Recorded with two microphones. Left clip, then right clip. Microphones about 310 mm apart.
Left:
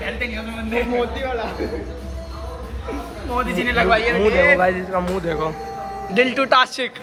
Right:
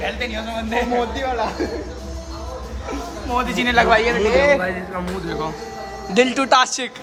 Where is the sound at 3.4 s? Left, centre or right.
Right.